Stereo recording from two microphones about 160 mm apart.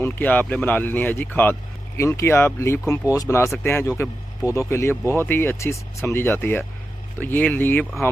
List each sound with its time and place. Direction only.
0.0 s speech: 10° left (ahead or behind)